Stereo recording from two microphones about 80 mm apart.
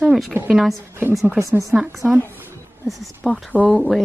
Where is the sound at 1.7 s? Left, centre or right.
Centre.